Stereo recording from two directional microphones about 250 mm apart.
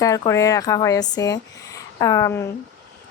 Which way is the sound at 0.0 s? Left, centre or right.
Centre.